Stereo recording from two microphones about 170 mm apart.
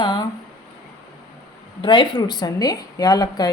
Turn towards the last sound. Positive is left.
turn(degrees=20)  # may be behind; listen again after turning